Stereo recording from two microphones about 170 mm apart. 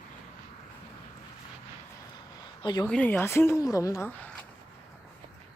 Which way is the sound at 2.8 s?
5° left (ahead or behind).